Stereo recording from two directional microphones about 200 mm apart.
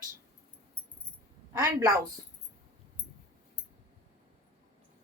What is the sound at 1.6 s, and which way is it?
Speech, 15° right (ahead or behind).